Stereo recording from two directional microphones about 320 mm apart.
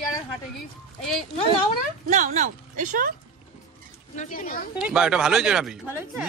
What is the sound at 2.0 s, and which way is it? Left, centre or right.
Speech, right.